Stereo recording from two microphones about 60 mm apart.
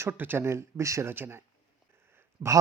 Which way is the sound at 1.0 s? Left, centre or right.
Right.